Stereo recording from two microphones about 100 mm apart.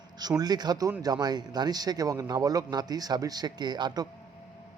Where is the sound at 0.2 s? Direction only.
40° right (ahead or behind).